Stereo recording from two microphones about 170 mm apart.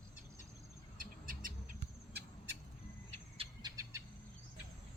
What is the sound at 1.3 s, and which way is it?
Bird, 55° right (ahead or behind).